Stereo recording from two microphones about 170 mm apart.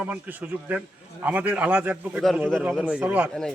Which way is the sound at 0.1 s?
10° right (ahead or behind).